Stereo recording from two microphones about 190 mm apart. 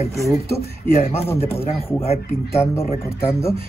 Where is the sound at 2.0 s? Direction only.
30° left (ahead or behind).